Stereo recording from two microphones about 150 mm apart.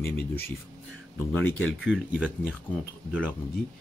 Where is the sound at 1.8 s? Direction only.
10° right (ahead or behind).